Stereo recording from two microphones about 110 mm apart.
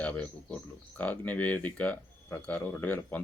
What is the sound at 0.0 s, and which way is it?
Speech, 15° left (ahead or behind).